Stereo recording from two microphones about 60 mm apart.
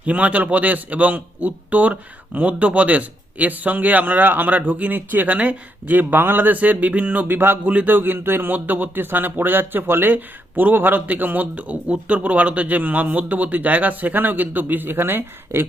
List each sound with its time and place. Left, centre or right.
0.0 s a man's voice: right
7.3 s speech: right
7.6 s a man's voice: right